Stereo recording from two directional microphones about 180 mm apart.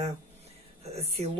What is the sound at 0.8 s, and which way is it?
Speech, 35° right (ahead or behind).